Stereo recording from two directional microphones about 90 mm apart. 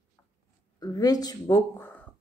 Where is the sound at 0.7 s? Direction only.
45° left (ahead or behind).